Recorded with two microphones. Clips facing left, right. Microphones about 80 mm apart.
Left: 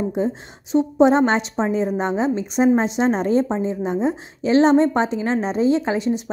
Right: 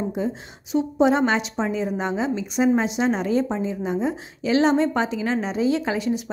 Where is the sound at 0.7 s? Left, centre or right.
Left.